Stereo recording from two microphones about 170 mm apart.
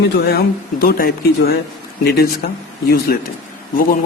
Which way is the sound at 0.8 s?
60° left (ahead or behind).